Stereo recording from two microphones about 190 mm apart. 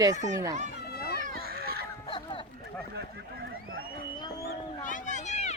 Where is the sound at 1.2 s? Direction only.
55° right (ahead or behind).